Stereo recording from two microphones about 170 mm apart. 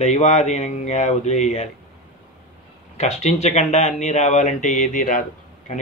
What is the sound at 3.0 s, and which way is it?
Speech, 40° left (ahead or behind).